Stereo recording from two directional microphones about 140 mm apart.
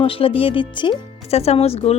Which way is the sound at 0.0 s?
40° left (ahead or behind).